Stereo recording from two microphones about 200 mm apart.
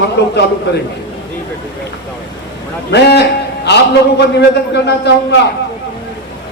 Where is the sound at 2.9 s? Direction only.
55° left (ahead or behind).